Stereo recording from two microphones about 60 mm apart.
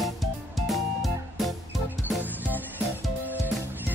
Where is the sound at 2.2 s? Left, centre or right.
Right.